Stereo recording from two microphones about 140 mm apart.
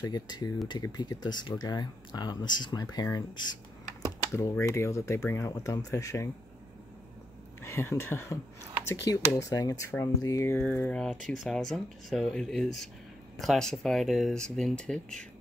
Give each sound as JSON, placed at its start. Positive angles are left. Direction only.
{"t": 0.0, "sound": "speech", "side_deg": 30}
{"t": 7.6, "sound": "speech", "side_deg": 20}
{"t": 11.4, "sound": "speech", "side_deg": 0}